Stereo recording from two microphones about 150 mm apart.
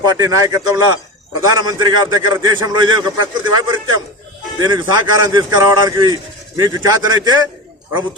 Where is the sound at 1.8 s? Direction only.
25° right (ahead or behind).